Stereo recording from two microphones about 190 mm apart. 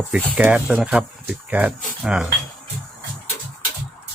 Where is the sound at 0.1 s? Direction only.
5° right (ahead or behind).